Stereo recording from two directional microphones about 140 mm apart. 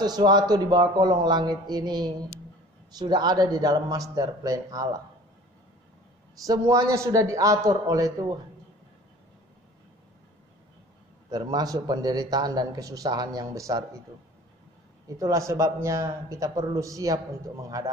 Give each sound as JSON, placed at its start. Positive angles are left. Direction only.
{"t": 0.0, "sound": "a man's voice", "side_deg": -30}
{"t": 6.4, "sound": "a man's voice", "side_deg": -25}
{"t": 11.2, "sound": "a man's voice", "side_deg": -30}
{"t": 15.1, "sound": "a man's voice", "side_deg": -25}